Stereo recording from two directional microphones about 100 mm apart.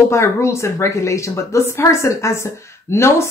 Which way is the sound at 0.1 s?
30° left (ahead or behind).